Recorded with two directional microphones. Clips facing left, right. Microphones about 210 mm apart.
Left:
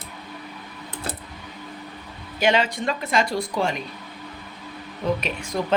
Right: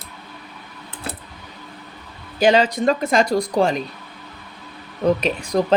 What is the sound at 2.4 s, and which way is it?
Speech, 35° right (ahead or behind).